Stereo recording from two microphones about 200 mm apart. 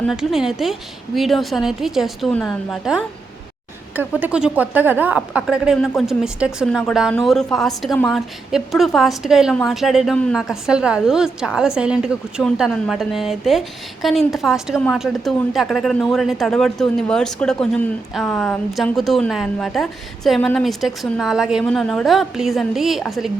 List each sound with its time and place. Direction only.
0.1 s speech: centre (ahead or behind)